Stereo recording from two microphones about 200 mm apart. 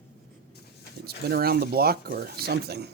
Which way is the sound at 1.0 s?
50° right (ahead or behind).